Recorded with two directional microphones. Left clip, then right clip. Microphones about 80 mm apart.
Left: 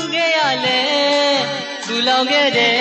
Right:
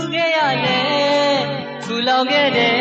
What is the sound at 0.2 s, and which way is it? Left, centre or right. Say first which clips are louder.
Music: even; left.